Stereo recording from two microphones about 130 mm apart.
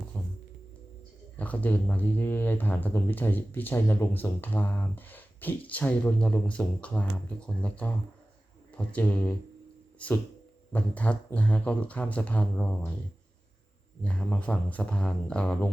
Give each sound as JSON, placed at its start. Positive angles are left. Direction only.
{"t": 0.1, "sound": "music", "side_deg": 15}
{"t": 1.4, "sound": "speech", "side_deg": 10}
{"t": 14.0, "sound": "speech", "side_deg": 10}